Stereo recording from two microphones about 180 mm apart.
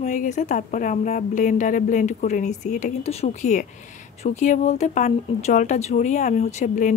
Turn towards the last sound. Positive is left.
turn(degrees=40)  # may be behind; listen again after turning